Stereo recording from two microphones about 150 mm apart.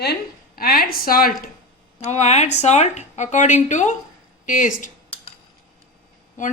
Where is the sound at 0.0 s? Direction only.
85° left.